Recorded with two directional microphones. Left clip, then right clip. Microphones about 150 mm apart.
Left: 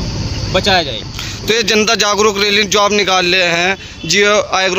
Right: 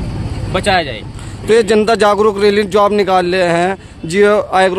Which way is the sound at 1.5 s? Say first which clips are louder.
Right 2 dB; 25° right (ahead or behind).